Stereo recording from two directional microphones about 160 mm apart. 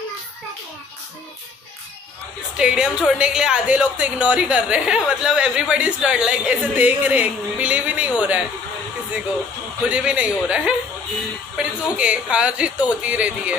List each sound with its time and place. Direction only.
2.5 s a woman's voice: 5° right (ahead or behind)
9.8 s a woman's voice: 5° right (ahead or behind)